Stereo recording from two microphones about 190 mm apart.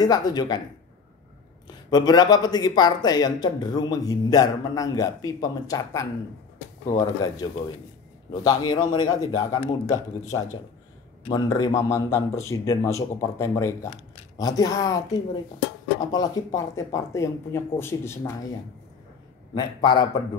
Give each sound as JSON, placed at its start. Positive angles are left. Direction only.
{"t": 0.0, "sound": "speech", "side_deg": 20}
{"t": 1.7, "sound": "speech", "side_deg": 20}
{"t": 19.5, "sound": "speech", "side_deg": 20}